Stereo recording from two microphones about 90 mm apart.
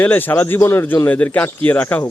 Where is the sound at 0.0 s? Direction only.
20° left (ahead or behind).